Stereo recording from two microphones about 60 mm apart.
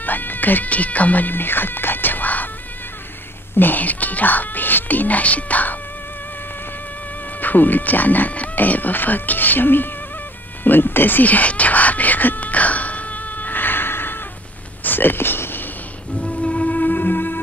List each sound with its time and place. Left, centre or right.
0.0 s speech: left
3.5 s speech: left
7.3 s speech: left
10.6 s a sound: left
16.2 s music: centre; by 17.4 s left